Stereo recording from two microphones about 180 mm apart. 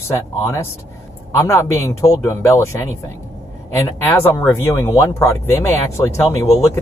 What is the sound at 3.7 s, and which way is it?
Speech, 15° left (ahead or behind).